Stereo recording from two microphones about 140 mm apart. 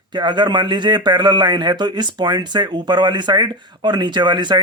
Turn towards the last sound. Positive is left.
turn(degrees=-30)  # may be behind; listen again after turning